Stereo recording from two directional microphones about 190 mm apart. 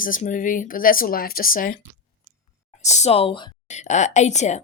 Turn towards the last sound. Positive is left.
turn(degrees=35)  # may be behind; listen again after turning